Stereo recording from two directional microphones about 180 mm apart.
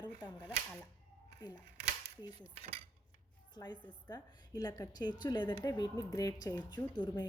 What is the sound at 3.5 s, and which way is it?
A woman's voice, 25° left (ahead or behind).